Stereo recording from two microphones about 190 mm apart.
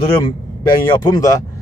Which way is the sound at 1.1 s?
20° left (ahead or behind).